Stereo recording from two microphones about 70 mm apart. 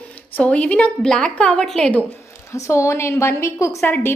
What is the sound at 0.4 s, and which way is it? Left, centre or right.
A woman's voice, centre.